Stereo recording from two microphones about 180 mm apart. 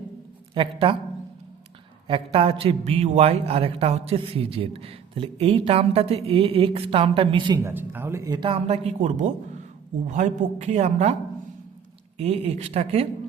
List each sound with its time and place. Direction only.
0.5 s speech: 30° right (ahead or behind)
2.0 s a man's voice: 30° right (ahead or behind)
7.6 s a man's voice: 10° right (ahead or behind); by 11.1 s 40° right (ahead or behind)
12.1 s a man's voice: 35° right (ahead or behind)